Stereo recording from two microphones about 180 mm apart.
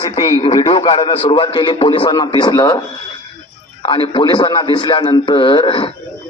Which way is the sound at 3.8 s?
25° left (ahead or behind).